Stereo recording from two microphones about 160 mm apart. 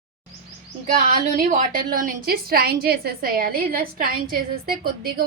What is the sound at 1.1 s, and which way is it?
A woman's voice, 50° right (ahead or behind).